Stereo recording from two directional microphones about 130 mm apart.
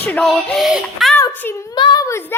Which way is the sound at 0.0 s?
10° left (ahead or behind).